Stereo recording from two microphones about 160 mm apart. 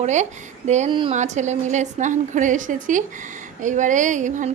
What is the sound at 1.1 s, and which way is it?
A woman's voice, 45° right (ahead or behind).